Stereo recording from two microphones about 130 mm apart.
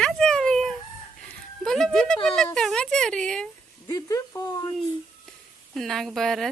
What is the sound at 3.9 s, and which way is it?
Speech, 25° left (ahead or behind).